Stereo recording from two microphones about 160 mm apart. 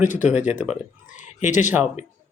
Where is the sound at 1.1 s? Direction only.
50° left (ahead or behind).